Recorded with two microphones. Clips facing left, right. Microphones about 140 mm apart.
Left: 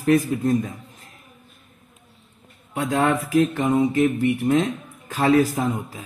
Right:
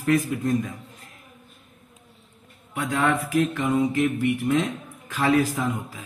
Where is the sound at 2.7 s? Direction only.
35° left (ahead or behind).